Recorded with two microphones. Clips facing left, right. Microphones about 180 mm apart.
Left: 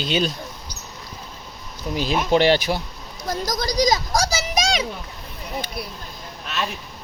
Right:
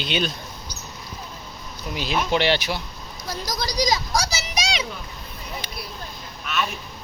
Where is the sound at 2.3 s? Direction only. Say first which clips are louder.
Left 6 dB; 45° left (ahead or behind).